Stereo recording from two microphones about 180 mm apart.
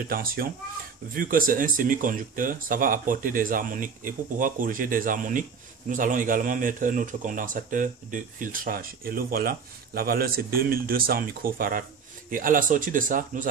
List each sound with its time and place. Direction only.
0.1 s a man's voice: 55° right (ahead or behind)